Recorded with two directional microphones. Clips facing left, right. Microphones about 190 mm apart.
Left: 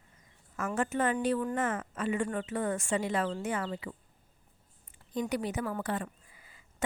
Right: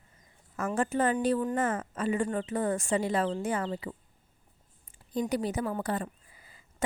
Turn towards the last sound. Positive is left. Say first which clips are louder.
# right 5 dB
turn(degrees=-35)  # may be behind; listen again after turning